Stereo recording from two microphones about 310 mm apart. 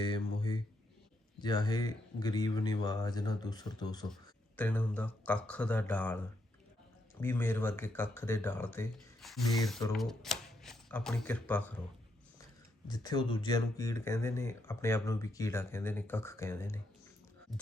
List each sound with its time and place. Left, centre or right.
0.0 s a sound: centre
1.4 s speech: centre
7.2 s speech: centre
12.9 s speech: centre